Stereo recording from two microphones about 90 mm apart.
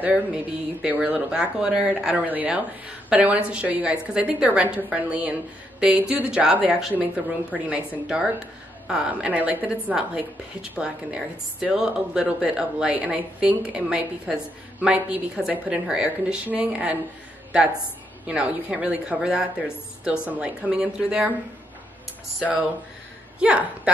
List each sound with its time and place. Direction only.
0.0 s a woman's voice: 15° right (ahead or behind)
18.2 s a woman's voice: 10° right (ahead or behind)
23.4 s a woman's voice: 15° right (ahead or behind)